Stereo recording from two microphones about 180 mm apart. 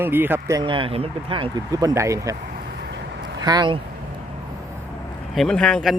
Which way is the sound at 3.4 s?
25° right (ahead or behind).